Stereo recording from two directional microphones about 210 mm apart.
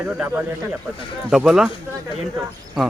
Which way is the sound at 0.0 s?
10° right (ahead or behind).